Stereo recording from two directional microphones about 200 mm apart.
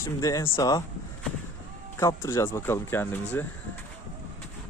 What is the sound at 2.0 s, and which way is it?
Speech, 15° left (ahead or behind).